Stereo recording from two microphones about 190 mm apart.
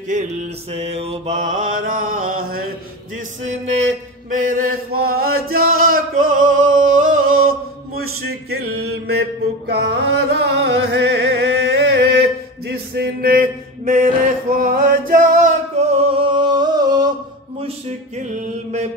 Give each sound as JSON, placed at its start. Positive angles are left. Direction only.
{"t": 0.1, "sound": "mantra", "side_deg": -40}
{"t": 3.4, "sound": "mantra", "side_deg": -35}
{"t": 5.8, "sound": "singing", "side_deg": -45}
{"t": 6.8, "sound": "chant", "side_deg": -45}
{"t": 8.2, "sound": "male singing", "side_deg": -55}
{"t": 8.7, "sound": "mantra", "side_deg": -60}
{"t": 9.7, "sound": "music", "side_deg": -60}
{"t": 17.6, "sound": "music", "side_deg": -35}